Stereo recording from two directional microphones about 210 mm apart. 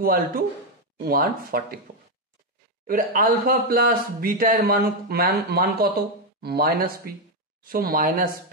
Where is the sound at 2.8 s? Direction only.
40° right (ahead or behind).